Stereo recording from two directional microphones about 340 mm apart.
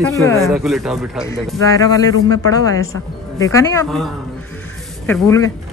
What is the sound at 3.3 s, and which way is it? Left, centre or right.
Speech, centre.